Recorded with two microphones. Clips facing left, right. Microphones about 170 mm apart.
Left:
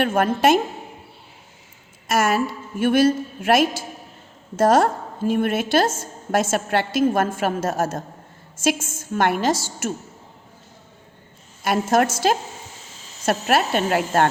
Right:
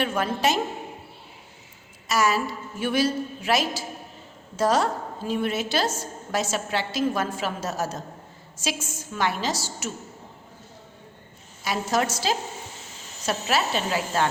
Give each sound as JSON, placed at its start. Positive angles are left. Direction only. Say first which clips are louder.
{"t": 0.0, "sound": "speech", "louder": "left 6 dB", "side_deg": 55}
{"t": 2.0, "sound": "a woman's voice", "louder": "left 3 dB", "side_deg": 55}
{"t": 11.6, "sound": "speech", "louder": "left 6 dB", "side_deg": 55}